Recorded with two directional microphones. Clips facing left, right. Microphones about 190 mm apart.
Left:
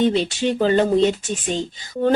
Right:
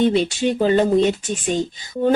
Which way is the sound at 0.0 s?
10° right (ahead or behind).